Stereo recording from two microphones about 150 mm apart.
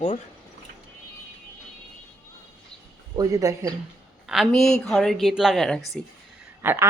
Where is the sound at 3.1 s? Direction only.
25° right (ahead or behind).